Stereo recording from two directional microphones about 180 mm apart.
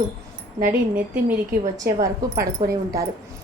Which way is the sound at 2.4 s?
20° right (ahead or behind).